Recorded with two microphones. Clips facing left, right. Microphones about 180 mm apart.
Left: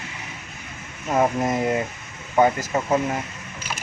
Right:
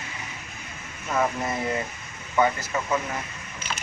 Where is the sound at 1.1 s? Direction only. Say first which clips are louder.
Left 5 dB; 45° left (ahead or behind).